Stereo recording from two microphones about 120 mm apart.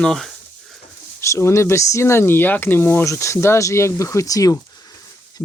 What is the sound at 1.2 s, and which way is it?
Speech, 20° left (ahead or behind).